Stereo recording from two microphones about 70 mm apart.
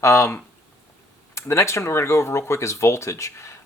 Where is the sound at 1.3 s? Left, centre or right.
Left.